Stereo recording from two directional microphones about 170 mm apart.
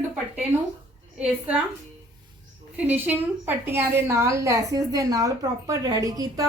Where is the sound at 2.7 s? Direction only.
10° right (ahead or behind).